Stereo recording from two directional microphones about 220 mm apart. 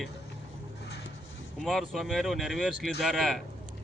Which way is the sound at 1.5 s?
Centre (ahead or behind).